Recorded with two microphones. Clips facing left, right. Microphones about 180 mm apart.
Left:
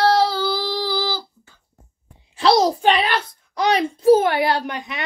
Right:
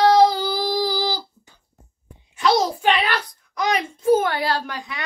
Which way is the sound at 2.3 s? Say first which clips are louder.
Left 3 dB; 35° left (ahead or behind).